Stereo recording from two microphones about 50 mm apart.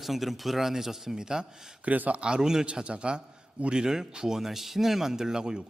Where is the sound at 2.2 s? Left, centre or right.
Centre.